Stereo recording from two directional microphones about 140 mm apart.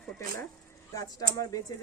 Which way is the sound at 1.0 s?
25° left (ahead or behind).